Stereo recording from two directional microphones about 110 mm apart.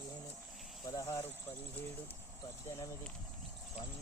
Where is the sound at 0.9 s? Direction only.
30° left (ahead or behind).